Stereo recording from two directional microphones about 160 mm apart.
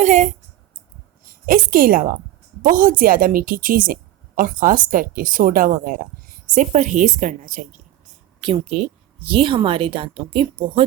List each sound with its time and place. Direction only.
0.0 s a woman's voice: 50° right (ahead or behind)
1.2 s a woman's voice: 65° right (ahead or behind)
8.4 s speech: 35° right (ahead or behind)